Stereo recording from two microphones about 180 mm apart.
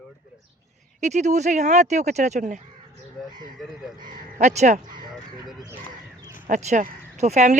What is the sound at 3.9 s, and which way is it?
Speech, 25° right (ahead or behind).